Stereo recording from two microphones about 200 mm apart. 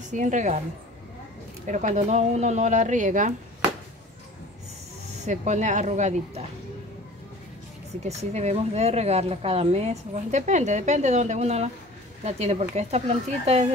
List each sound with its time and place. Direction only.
0.1 s speech: 35° right (ahead or behind)
1.7 s speech: 35° right (ahead or behind)
5.2 s speech: 35° right (ahead or behind)
8.0 s speech: 35° right (ahead or behind)